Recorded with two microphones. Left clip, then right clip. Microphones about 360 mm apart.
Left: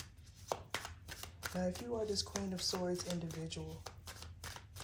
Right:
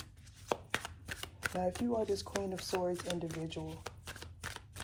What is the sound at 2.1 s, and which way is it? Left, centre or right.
Speech, right.